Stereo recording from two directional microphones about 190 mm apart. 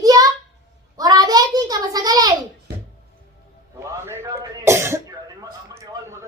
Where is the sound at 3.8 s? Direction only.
15° right (ahead or behind).